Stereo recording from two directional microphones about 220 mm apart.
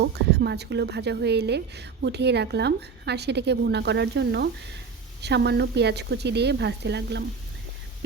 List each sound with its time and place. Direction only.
0.3 s a woman's voice: 50° right (ahead or behind)